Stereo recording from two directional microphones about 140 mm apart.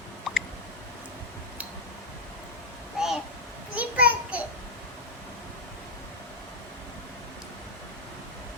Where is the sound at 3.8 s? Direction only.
10° right (ahead or behind).